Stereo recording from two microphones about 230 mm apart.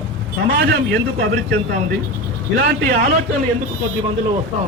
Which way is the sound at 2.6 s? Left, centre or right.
Right.